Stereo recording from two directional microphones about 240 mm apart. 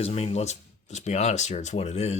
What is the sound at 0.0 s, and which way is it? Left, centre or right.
Speech, left.